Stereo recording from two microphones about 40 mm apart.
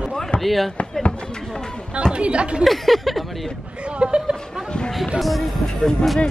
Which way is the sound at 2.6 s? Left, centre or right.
Centre.